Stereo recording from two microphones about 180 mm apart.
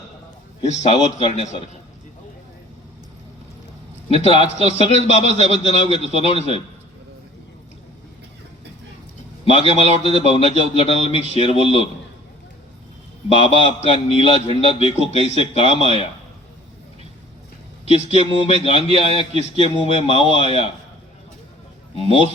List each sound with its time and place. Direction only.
0.7 s a man's voice: 40° left (ahead or behind)
4.1 s a man's voice: 30° left (ahead or behind)
9.4 s a man's voice: 35° left (ahead or behind)
13.4 s a man's voice: 35° left (ahead or behind)
17.8 s a man's voice: 35° left (ahead or behind)
19.2 s speech: 35° right (ahead or behind)
19.6 s a man's voice: 35° left (ahead or behind)
21.9 s a man's voice: 35° left (ahead or behind)